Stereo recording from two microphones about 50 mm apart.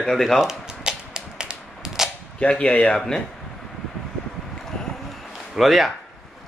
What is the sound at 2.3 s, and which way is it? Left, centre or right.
Speech, left.